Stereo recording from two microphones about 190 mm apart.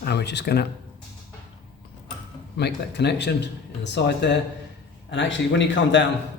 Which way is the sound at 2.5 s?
60° left (ahead or behind).